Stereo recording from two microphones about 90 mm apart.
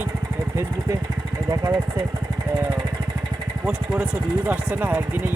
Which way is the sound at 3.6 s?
15° right (ahead or behind).